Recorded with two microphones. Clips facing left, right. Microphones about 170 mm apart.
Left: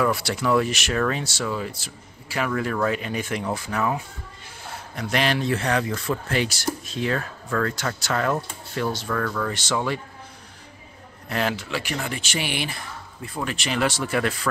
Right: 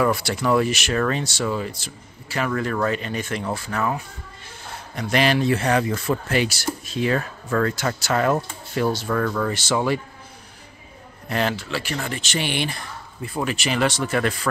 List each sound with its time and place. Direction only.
0.0 s speech: centre (ahead or behind)
4.9 s speech: centre (ahead or behind)
9.5 s speech: 5° right (ahead or behind)
11.2 s speech: centre (ahead or behind)
11.5 s speech: 15° left (ahead or behind); by 13.8 s 5° right (ahead or behind)
13.8 s speech: 10° left (ahead or behind)